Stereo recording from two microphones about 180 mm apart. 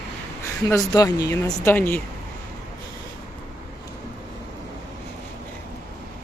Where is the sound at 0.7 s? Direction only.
20° left (ahead or behind).